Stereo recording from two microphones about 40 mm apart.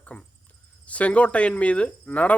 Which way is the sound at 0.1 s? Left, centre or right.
Left.